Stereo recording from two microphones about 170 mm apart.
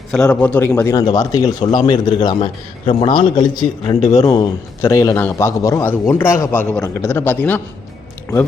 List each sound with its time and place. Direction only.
0.1 s a man's voice: 5° left (ahead or behind)